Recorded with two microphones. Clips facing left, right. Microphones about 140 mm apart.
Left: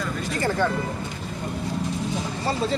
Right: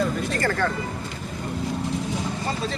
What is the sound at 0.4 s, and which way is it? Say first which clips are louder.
Speech: left 2 dB; 20° left (ahead or behind).